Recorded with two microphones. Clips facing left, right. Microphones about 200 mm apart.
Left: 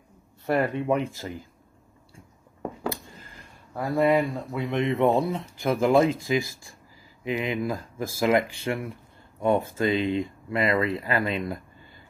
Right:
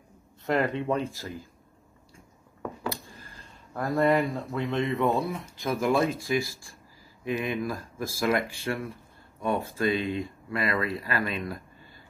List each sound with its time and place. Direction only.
0.6 s speech: 15° left (ahead or behind)
2.9 s speech: 15° left (ahead or behind)